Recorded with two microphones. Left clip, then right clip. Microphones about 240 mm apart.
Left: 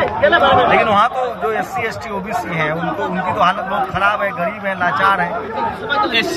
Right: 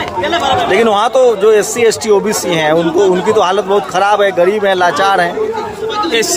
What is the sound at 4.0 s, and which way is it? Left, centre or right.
A man's voice, right.